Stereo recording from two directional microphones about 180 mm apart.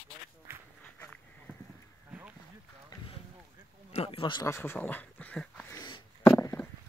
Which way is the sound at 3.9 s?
35° left (ahead or behind).